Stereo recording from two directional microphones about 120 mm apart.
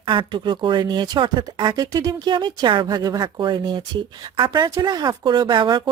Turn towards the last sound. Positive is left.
turn(degrees=-40)  # may be behind; listen again after turning